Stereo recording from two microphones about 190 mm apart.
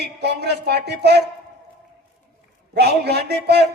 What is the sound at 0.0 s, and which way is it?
A man's voice, 60° right (ahead or behind).